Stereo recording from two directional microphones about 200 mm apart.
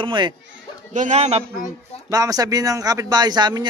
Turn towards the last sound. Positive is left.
turn(degrees=-20)  # may be behind; listen again after turning